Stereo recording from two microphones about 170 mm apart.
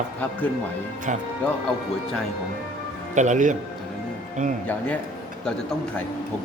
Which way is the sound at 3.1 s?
45° right (ahead or behind).